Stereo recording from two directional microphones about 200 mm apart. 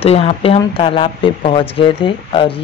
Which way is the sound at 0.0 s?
30° left (ahead or behind).